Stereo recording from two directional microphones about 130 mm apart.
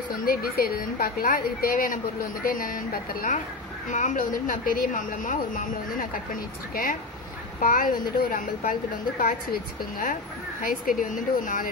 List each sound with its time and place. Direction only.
0.6 s a woman's voice: 90° left
3.9 s a woman's voice: 75° left (ahead or behind)
10.6 s a woman's voice: 90° left